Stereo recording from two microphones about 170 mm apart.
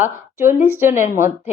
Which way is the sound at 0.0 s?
15° right (ahead or behind).